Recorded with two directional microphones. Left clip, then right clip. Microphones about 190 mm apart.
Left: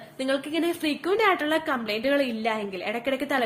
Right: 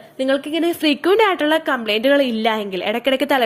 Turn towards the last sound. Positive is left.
turn(degrees=-45)  # may be behind; listen again after turning